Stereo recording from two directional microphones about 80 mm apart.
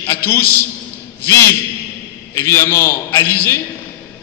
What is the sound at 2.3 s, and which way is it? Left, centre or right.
Speech, left.